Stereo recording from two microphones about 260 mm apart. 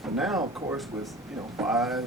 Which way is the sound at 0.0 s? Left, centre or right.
Centre.